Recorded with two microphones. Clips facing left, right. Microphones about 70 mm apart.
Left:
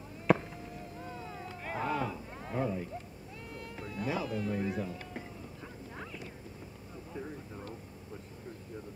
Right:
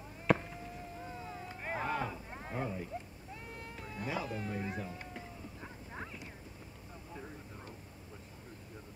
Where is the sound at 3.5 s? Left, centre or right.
Right.